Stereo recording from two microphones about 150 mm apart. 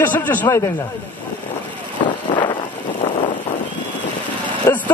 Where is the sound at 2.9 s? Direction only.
45° left (ahead or behind).